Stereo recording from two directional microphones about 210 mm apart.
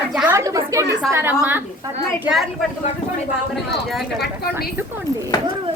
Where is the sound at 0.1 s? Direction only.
5° right (ahead or behind).